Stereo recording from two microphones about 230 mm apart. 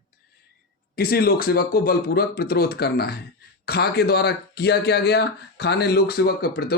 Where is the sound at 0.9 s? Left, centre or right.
Left.